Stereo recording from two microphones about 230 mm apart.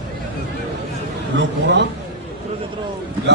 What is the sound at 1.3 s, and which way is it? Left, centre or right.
Speech, right.